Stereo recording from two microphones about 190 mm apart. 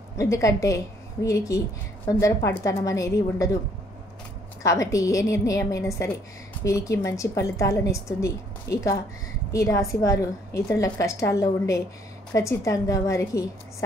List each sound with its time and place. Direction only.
0.2 s a woman's voice: 15° left (ahead or behind)
4.6 s a woman's voice: 15° left (ahead or behind)